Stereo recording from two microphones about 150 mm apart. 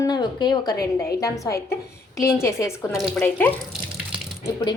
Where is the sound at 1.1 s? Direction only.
20° left (ahead or behind).